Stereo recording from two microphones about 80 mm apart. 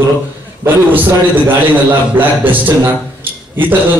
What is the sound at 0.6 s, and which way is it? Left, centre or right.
A man's voice, right.